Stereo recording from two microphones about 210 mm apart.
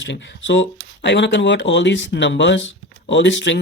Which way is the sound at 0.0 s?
60° left (ahead or behind).